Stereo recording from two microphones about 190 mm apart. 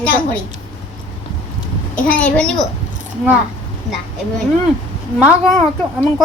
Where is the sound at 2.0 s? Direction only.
5° left (ahead or behind).